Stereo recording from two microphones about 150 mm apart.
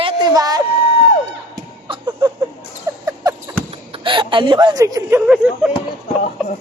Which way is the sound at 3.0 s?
25° right (ahead or behind).